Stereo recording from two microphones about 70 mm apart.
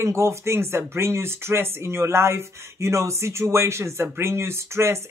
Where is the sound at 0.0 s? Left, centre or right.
Right.